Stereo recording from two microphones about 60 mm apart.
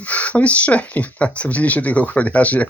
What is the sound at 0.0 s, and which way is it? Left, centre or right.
Speech, left.